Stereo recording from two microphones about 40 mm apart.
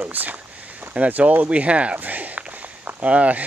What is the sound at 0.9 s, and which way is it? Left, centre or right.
Speech, right.